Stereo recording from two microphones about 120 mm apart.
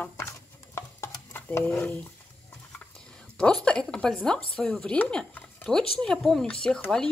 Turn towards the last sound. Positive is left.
turn(degrees=5)  # may be behind; listen again after turning